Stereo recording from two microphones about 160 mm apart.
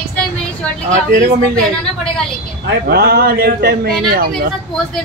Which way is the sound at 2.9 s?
75° right (ahead or behind).